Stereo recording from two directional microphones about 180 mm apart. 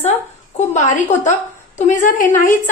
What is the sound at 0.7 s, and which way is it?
A woman's voice, 45° left (ahead or behind).